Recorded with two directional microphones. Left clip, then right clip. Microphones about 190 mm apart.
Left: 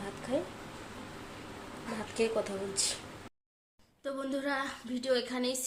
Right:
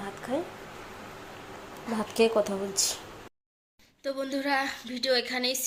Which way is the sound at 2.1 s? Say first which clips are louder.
Right 7 dB; 20° right (ahead or behind).